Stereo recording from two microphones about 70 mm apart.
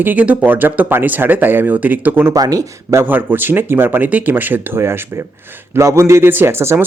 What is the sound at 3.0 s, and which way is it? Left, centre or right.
A man's voice, right.